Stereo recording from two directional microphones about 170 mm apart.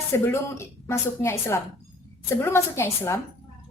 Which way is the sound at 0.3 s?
15° left (ahead or behind).